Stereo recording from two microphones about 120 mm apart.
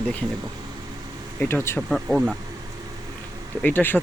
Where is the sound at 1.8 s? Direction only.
Centre (ahead or behind).